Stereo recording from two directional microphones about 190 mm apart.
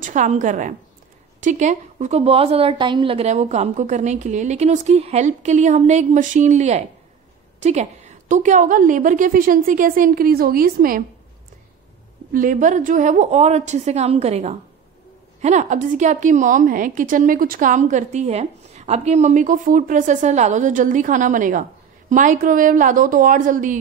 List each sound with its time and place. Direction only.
0.0 s a woman's voice: 40° right (ahead or behind)
12.3 s a woman's voice: 45° right (ahead or behind)